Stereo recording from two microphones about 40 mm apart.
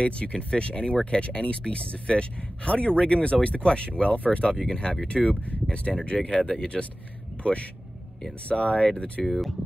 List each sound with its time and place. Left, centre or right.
0.0 s speech: left
4.6 s speech: centre
5.0 s speech: left
8.5 s speech: left
9.2 s speech: centre